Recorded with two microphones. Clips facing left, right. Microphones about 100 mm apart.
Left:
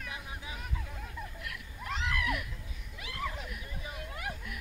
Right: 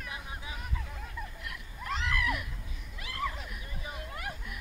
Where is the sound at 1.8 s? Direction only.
5° left (ahead or behind).